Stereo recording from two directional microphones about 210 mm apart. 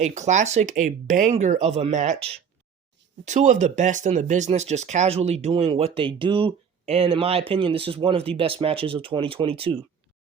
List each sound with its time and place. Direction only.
0.0 s speech: 35° right (ahead or behind)
3.2 s speech: 35° right (ahead or behind)